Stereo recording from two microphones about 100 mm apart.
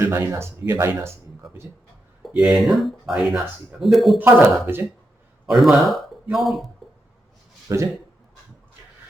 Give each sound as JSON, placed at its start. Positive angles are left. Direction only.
{"t": 0.0, "sound": "a man's voice", "side_deg": -20}
{"t": 2.3, "sound": "speech", "side_deg": -5}
{"t": 4.2, "sound": "a man's voice", "side_deg": -20}
{"t": 5.5, "sound": "speech", "side_deg": 0}
{"t": 7.7, "sound": "speech", "side_deg": -30}